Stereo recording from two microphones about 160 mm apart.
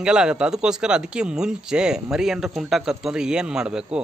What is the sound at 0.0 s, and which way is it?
Speech, 5° right (ahead or behind).